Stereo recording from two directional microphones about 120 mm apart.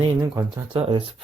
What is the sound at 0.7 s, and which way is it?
Speech, 50° right (ahead or behind).